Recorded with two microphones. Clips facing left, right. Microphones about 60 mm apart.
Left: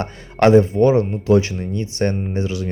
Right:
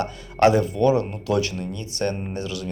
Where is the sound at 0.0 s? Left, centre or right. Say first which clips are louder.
Left 2 dB; left.